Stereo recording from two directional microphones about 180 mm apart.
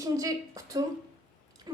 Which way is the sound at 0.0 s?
20° right (ahead or behind).